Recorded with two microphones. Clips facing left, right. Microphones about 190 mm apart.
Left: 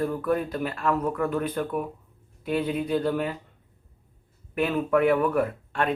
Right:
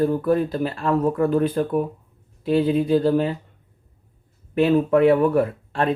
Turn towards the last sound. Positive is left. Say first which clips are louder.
# right 4 dB
turn(degrees=-30)  # may be behind; listen again after turning